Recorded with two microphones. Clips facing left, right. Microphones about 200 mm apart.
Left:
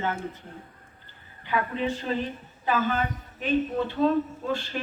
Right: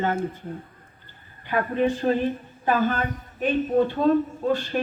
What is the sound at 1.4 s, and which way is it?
A man's voice, 50° right (ahead or behind).